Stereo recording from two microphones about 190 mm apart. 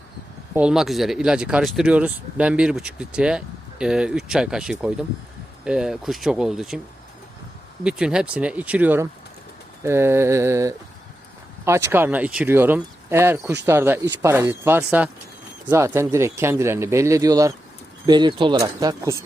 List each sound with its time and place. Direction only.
0.5 s speech: 5° right (ahead or behind)
7.9 s speech: 5° right (ahead or behind)
11.9 s speech: 10° right (ahead or behind)